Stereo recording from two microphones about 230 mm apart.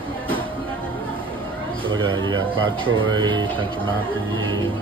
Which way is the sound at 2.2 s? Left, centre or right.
Right.